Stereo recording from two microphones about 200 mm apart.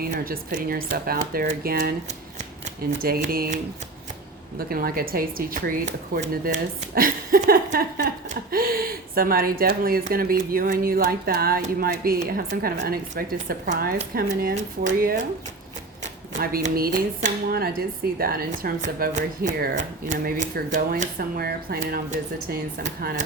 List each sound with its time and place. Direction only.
0.0 s speech: 45° right (ahead or behind)
3.0 s speech: 45° right (ahead or behind)
16.3 s speech: 45° right (ahead or behind)